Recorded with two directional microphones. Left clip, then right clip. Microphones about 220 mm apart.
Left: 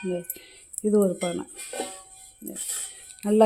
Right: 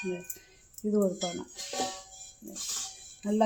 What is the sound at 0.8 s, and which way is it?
Speech, 50° left (ahead or behind).